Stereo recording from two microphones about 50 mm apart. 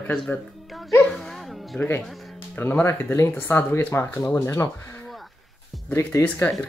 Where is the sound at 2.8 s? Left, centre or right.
Left.